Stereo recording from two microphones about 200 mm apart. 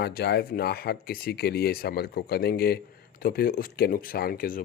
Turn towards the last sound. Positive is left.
turn(degrees=45)  # may be behind; listen again after turning